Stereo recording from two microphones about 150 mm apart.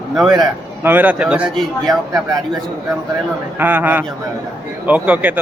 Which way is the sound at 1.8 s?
25° right (ahead or behind).